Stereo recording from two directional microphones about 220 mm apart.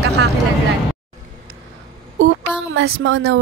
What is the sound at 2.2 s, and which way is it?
Speech, 60° right (ahead or behind).